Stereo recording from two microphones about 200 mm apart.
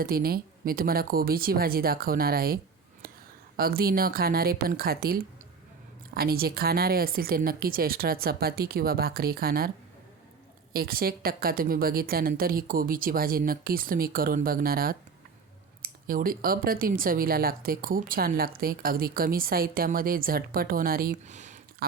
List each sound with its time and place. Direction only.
0.0 s speech: 50° right (ahead or behind)
3.0 s a sound: 45° right (ahead or behind)
3.6 s speech: 50° right (ahead or behind)